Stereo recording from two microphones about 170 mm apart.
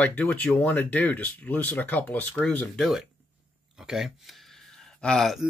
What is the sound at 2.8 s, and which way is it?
Speech, centre (ahead or behind).